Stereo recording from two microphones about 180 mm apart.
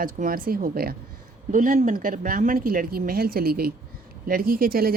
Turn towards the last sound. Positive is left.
turn(degrees=-55)  # may be behind; listen again after turning